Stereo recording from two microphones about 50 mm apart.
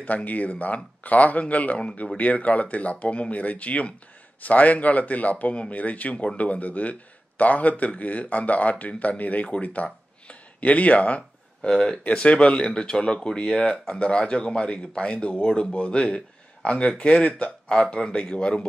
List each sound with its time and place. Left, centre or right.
0.0 s a man's voice: left
11.7 s speech: centre
12.0 s speech: left